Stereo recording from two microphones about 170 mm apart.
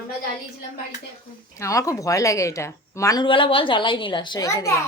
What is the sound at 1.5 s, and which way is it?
A woman's voice, 20° left (ahead or behind).